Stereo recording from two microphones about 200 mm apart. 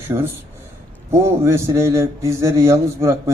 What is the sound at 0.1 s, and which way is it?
Speech, 20° right (ahead or behind).